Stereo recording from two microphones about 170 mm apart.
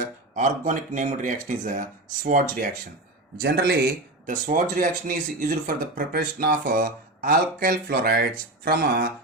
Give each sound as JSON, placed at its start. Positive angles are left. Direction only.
{"t": 0.3, "sound": "speech", "side_deg": -50}
{"t": 3.4, "sound": "speech", "side_deg": -70}
{"t": 4.3, "sound": "speech", "side_deg": -45}